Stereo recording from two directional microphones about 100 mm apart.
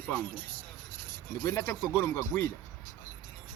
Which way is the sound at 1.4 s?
35° left (ahead or behind).